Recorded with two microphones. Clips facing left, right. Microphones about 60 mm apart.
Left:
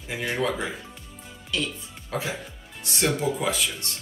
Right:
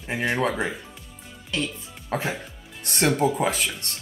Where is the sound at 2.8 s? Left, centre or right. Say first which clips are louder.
Right 4 dB; right.